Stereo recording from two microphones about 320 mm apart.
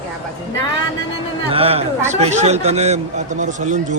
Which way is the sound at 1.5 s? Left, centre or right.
Centre.